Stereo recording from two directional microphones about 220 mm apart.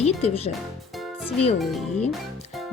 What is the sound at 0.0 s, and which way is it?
Speech, 30° left (ahead or behind).